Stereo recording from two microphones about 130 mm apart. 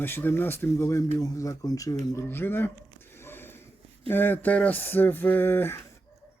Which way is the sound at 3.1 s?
15° left (ahead or behind).